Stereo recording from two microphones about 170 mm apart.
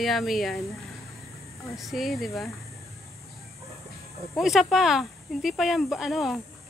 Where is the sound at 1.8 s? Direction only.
Centre (ahead or behind).